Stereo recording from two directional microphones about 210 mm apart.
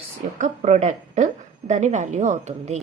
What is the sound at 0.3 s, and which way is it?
A woman's voice, 35° right (ahead or behind).